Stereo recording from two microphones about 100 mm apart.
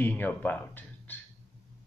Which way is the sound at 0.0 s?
20° left (ahead or behind).